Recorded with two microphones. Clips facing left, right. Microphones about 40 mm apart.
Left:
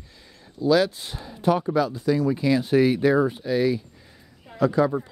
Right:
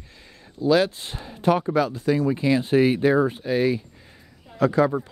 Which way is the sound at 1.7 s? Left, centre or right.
Right.